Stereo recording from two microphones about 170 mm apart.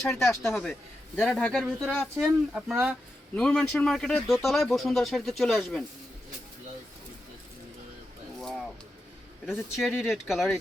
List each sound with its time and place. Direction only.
0.1 s speech: 15° left (ahead or behind)
0.4 s speech: centre (ahead or behind)
8.4 s a sound: centre (ahead or behind)
9.5 s speech: centre (ahead or behind)